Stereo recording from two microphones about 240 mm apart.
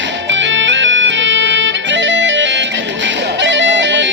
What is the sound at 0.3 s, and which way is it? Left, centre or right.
Music, right.